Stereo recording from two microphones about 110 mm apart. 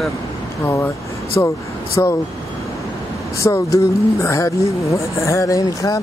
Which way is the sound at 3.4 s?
30° left (ahead or behind).